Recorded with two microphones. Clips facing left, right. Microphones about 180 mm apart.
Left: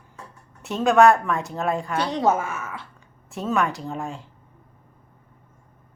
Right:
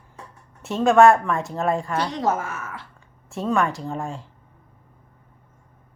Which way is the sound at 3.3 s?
Centre (ahead or behind).